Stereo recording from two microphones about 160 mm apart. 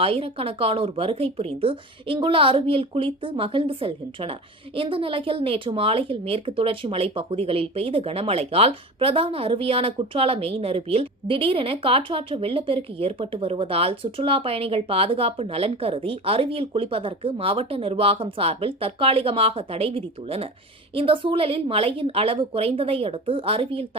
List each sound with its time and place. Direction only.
0.0 s speech: 35° right (ahead or behind)